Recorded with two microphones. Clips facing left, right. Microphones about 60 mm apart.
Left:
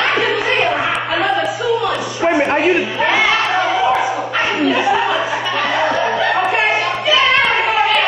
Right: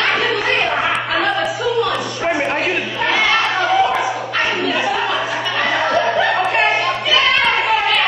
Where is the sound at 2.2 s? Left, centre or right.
Centre.